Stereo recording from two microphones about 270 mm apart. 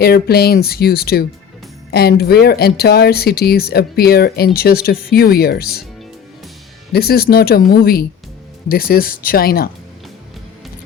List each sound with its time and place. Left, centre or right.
0.0 s speech: left
6.9 s speech: left